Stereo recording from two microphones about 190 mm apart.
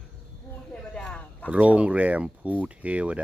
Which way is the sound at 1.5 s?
5° right (ahead or behind).